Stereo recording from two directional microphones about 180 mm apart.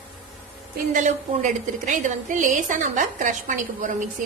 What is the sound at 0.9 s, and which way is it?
A woman's voice, 45° right (ahead or behind).